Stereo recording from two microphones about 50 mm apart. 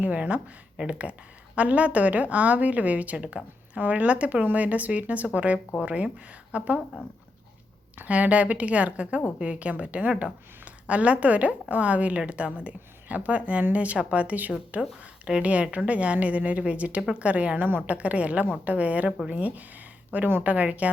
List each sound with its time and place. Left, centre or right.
0.0 s a woman's voice: right
7.9 s a woman's voice: right